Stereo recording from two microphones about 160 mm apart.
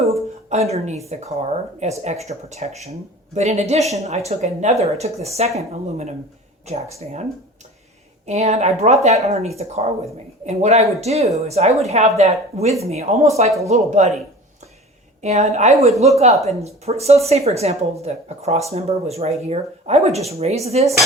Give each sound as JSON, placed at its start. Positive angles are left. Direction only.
{"t": 0.5, "sound": "speech", "side_deg": -40}
{"t": 8.3, "sound": "speech", "side_deg": -45}
{"t": 15.2, "sound": "speech", "side_deg": -45}